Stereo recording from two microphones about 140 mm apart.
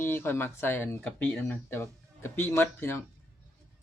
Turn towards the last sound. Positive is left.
turn(degrees=15)  # may be behind; listen again after turning